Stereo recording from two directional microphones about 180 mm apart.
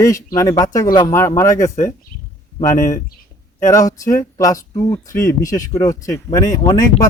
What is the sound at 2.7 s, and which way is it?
Speech, 45° left (ahead or behind).